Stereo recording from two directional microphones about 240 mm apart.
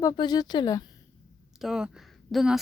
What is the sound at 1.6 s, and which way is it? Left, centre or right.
Speech, centre.